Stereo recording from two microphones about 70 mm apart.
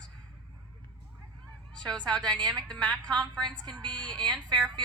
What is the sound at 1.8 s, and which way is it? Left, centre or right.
A woman's voice, centre.